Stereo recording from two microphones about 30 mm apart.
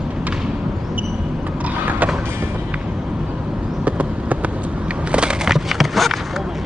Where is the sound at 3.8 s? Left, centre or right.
Right.